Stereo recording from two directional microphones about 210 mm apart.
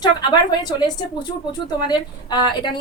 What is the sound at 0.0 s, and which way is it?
A woman's voice, 20° left (ahead or behind).